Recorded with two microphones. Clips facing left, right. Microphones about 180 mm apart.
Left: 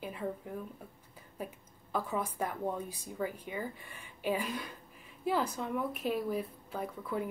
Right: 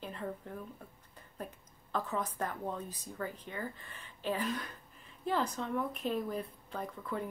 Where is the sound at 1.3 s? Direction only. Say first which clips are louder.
Left 2 dB; 10° left (ahead or behind).